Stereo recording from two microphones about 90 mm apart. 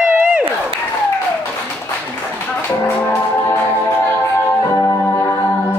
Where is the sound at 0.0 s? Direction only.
20° right (ahead or behind).